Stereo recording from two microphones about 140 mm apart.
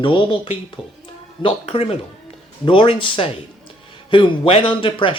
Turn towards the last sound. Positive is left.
turn(degrees=40)  # may be behind; listen again after turning